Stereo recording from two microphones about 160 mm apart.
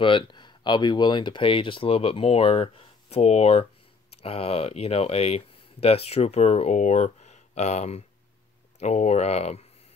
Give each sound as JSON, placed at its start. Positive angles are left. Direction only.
{"t": 0.0, "sound": "speech", "side_deg": 30}